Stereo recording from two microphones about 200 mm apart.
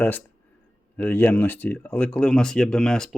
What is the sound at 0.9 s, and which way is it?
Speech, 10° left (ahead or behind).